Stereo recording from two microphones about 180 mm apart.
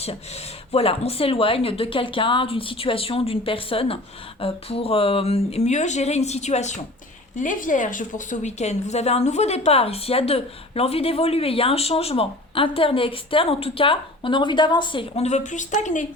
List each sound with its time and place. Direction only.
0.7 s a woman's voice: 35° left (ahead or behind)